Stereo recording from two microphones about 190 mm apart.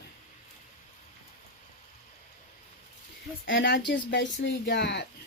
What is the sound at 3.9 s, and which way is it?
Speech, 65° left (ahead or behind).